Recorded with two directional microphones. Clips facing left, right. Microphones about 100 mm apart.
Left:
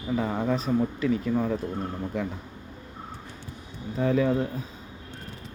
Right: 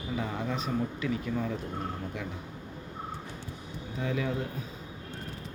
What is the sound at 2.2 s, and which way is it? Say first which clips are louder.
Speech: left 8 dB; 40° left (ahead or behind).